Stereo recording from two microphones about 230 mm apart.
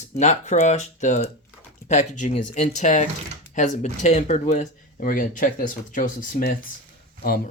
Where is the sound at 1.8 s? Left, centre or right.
Left.